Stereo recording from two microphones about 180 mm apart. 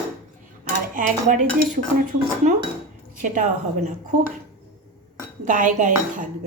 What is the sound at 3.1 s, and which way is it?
Speech, 45° right (ahead or behind).